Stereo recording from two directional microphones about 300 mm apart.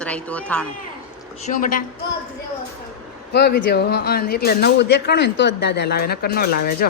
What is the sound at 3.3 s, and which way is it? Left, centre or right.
Speech, left.